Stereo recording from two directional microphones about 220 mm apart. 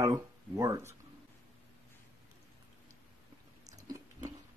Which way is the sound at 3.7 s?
15° right (ahead or behind).